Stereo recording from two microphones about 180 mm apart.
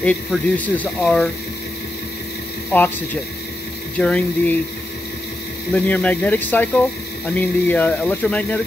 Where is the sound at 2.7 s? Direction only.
10° left (ahead or behind).